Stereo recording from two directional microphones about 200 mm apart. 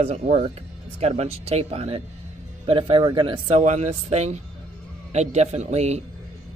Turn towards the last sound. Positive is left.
turn(degrees=-35)  # may be behind; listen again after turning